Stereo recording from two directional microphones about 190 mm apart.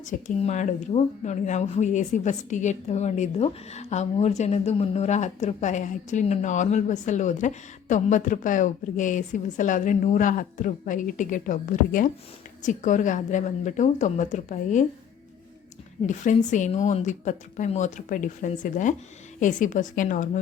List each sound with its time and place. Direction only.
0.0 s speech: 40° left (ahead or behind)
16.0 s a woman's voice: 40° left (ahead or behind)